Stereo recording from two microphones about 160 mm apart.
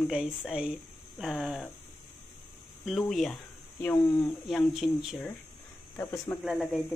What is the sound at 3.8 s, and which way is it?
Speech, 15° left (ahead or behind).